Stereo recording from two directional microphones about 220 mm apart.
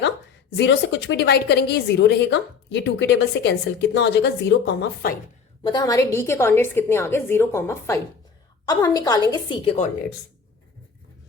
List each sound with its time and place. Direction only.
0.5 s a woman's voice: 50° left (ahead or behind)
5.6 s a woman's voice: 20° left (ahead or behind)